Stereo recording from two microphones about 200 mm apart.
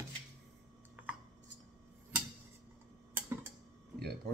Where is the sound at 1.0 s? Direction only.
10° right (ahead or behind).